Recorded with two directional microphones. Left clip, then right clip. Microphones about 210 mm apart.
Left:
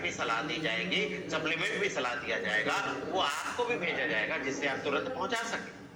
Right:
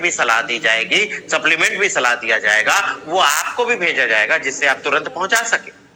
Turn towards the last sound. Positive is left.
turn(degrees=-40)  # may be behind; listen again after turning